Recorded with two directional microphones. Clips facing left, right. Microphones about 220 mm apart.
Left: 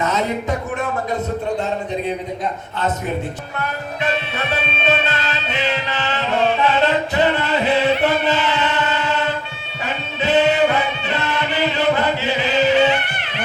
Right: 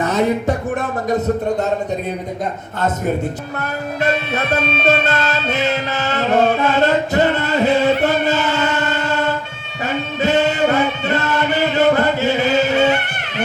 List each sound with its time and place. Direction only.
4.0 s music: 45° right (ahead or behind)